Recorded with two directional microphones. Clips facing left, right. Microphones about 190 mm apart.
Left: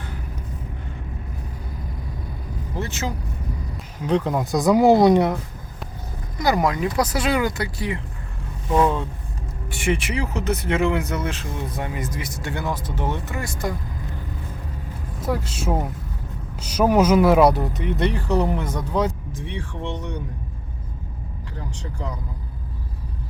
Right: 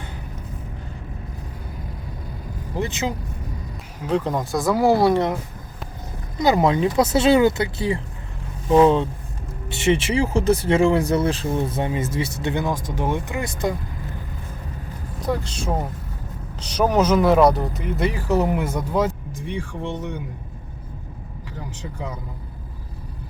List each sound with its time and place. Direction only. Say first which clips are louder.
2.7 s speech: right 3 dB; 15° right (ahead or behind)
4.0 s speech: left 1 dB; centre (ahead or behind)
4.5 s speech: left 3 dB; 20° left (ahead or behind)
6.4 s speech: right 3 dB; 25° right (ahead or behind)
15.2 s speech: even; 5° left (ahead or behind)